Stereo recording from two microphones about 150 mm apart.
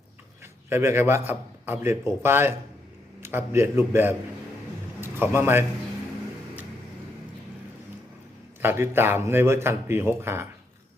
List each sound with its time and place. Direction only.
0.7 s a man's voice: 15° right (ahead or behind)
8.6 s speech: 15° right (ahead or behind)